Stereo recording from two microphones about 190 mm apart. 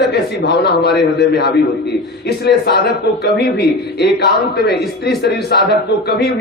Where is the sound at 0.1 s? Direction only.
60° left (ahead or behind).